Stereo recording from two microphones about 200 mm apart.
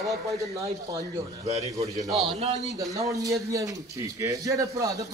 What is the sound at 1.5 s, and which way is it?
Speech, 35° right (ahead or behind).